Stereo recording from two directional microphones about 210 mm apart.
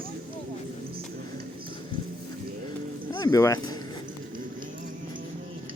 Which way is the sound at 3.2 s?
15° left (ahead or behind).